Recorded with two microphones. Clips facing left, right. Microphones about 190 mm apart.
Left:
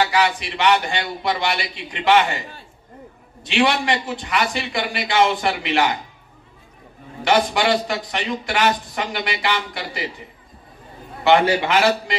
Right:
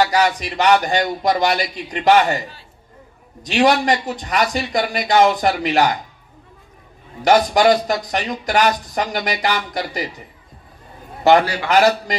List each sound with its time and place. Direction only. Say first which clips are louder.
0.0 s speech: right 3 dB; 40° right (ahead or behind)
3.4 s speech: right 4 dB; 40° right (ahead or behind)
7.2 s speech: right 5 dB; 40° right (ahead or behind)
11.4 s a man's voice: left 6 dB; 20° left (ahead or behind)
11.7 s speech: right 3 dB; 40° right (ahead or behind)